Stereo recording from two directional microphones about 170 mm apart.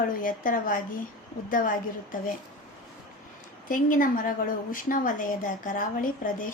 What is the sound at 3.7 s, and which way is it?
A woman's voice, 55° left (ahead or behind).